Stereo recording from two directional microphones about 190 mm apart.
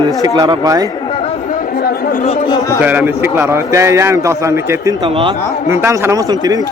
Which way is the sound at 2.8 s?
10° right (ahead or behind).